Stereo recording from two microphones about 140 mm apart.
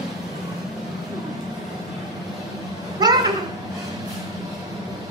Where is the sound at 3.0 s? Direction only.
30° right (ahead or behind).